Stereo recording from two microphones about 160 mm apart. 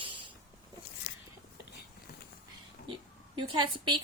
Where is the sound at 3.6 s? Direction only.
30° right (ahead or behind).